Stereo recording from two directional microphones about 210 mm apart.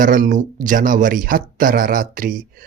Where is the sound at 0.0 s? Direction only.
40° right (ahead or behind).